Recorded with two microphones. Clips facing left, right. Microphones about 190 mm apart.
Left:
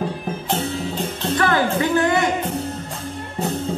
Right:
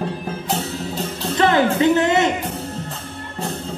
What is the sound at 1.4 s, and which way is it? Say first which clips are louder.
Music: right 4 dB; 20° right (ahead or behind).